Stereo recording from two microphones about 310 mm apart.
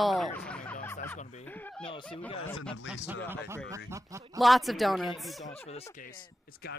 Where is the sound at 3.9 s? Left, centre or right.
Centre.